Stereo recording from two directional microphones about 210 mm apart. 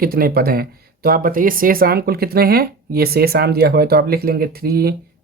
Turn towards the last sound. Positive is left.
turn(degrees=-45)  # may be behind; listen again after turning